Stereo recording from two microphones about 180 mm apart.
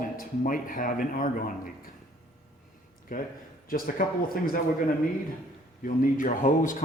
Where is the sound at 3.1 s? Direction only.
50° left (ahead or behind).